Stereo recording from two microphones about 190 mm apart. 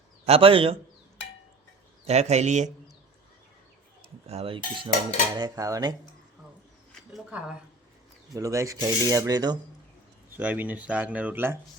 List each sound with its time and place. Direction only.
0.3 s cutlery: 30° right (ahead or behind)
2.0 s speech: 35° right (ahead or behind)
4.3 s cutlery: 30° right (ahead or behind)
5.4 s speech: 20° right (ahead or behind)
7.1 s speech: 5° right (ahead or behind)
8.4 s speech: 15° right (ahead or behind)
10.2 s speech: 10° right (ahead or behind)